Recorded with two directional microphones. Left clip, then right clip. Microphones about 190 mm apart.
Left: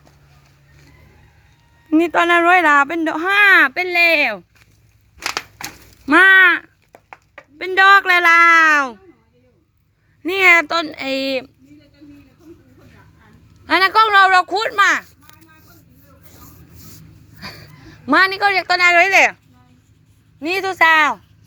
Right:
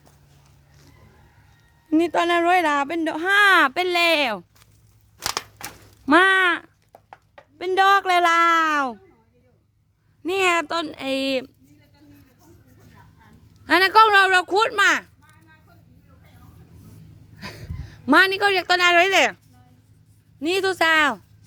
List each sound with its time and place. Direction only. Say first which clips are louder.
1.9 s speech: left 6 dB; 15° right (ahead or behind); by 4.4 s 30° right (ahead or behind)
5.1 s crushing: left 4 dB; 30° left (ahead or behind)
6.1 s speech: left 7 dB; 20° right (ahead or behind)
6.9 s a sound: left 6 dB; 55° left (ahead or behind)
7.6 s a woman's voice: left 6 dB; 20° right (ahead or behind)
10.2 s speech: left 8 dB; 5° right (ahead or behind)
13.7 s a woman's voice: left 2 dB; 25° right (ahead or behind)
15.3 s a sound: left 7 dB; 55° left (ahead or behind)
17.3 s a woman's voice: left 3 dB; 20° right (ahead or behind)
20.4 s speech: left 5 dB; 30° right (ahead or behind)